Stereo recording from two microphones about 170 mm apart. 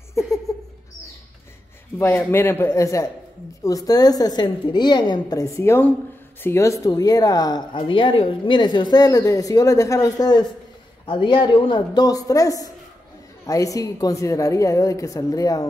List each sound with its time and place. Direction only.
2.0 s a man's voice: 15° left (ahead or behind)